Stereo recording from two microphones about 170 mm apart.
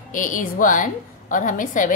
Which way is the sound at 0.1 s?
50° left (ahead or behind).